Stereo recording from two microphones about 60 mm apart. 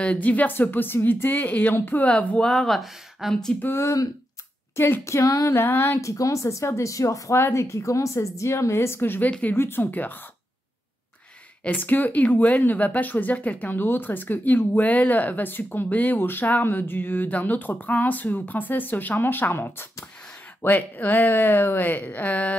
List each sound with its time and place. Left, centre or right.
0.0 s speech: left
2.4 s speech: centre
3.6 s a woman's voice: left
5.2 s female singing: left
5.5 s speech: left
5.9 s speech: left
7.3 s a woman's voice: left
11.6 s speech: left